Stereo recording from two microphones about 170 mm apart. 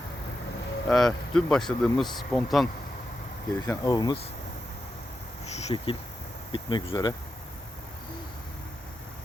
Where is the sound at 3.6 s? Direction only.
20° left (ahead or behind).